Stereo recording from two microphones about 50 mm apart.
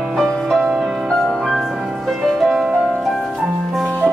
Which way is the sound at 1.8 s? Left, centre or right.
Centre.